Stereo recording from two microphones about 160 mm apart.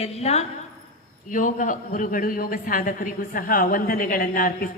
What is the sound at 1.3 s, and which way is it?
A woman's voice, 55° left (ahead or behind).